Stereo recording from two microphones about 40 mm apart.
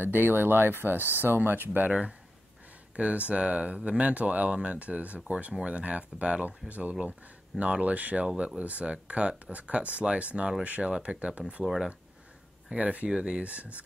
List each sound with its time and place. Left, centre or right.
0.0 s speech: right
1.9 s speech: right
3.0 s speech: right
12.7 s speech: right
13.1 s speech: right
13.4 s speech: right